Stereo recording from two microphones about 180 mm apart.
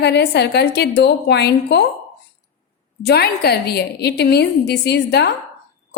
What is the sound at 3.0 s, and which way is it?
A woman's voice, 65° left (ahead or behind).